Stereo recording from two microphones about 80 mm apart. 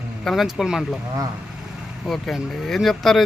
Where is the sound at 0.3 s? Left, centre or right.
Centre.